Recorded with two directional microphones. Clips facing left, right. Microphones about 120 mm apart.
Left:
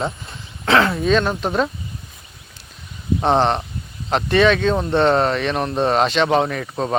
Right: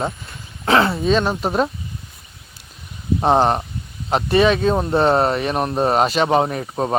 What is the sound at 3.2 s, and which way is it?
Speech, 5° right (ahead or behind).